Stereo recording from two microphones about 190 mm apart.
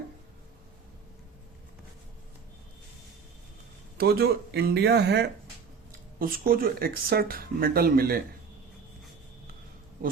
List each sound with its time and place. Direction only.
3.9 s speech: 55° right (ahead or behind)
5.9 s speech: 50° right (ahead or behind)